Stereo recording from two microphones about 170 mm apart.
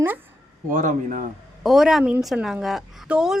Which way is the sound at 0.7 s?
50° right (ahead or behind).